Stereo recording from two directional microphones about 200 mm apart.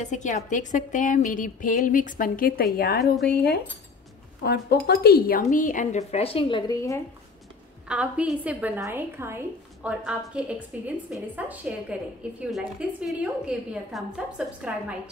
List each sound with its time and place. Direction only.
0.0 s a woman's voice: 35° left (ahead or behind)
3.3 s cutlery: 55° left (ahead or behind)
4.4 s a woman's voice: 50° left (ahead or behind); by 7.0 s 15° left (ahead or behind)
7.9 s a woman's voice: 5° right (ahead or behind)